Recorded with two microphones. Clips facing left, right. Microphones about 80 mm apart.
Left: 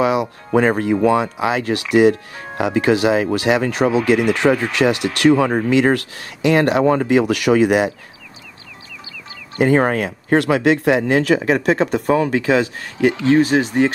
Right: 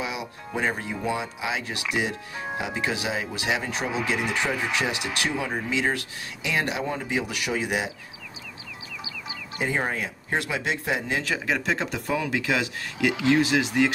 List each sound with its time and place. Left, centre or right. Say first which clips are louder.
0.0 s speech: left 14 dB; left
9.6 s speech: left 12 dB; left